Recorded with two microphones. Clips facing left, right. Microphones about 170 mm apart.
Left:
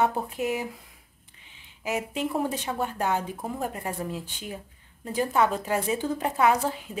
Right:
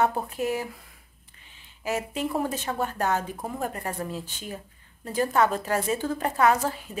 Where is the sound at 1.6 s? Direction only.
15° left (ahead or behind).